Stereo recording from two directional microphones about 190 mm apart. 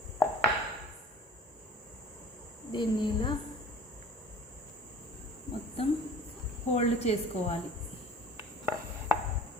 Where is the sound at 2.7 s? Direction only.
25° left (ahead or behind).